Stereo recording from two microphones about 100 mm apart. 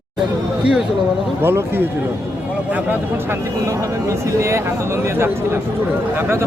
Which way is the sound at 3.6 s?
30° right (ahead or behind).